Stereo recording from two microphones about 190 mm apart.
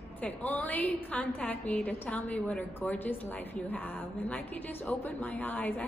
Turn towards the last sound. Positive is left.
turn(degrees=10)  # may be behind; listen again after turning